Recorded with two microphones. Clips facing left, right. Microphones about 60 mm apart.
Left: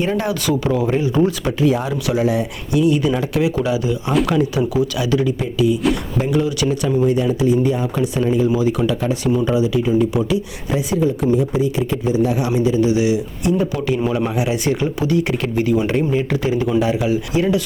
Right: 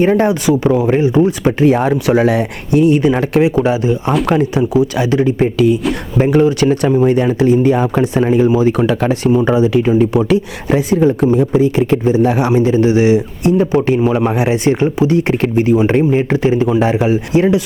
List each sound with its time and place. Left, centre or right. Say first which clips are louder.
0.0 s speech: right 8 dB; right
1.6 s a man's voice: right 6 dB; right
2.1 s speech: right 3 dB; right
2.7 s speech: right 5 dB; right
5.5 s a man's voice: right 4 dB; right
8.0 s a man's voice: right 3 dB; right
8.4 s a man's voice: right 5 dB; right
14.0 s speech: right 5 dB; right
14.3 s speech: right 6 dB; right